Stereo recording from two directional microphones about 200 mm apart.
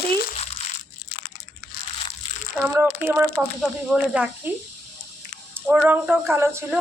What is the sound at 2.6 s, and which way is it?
Speech, 10° right (ahead or behind).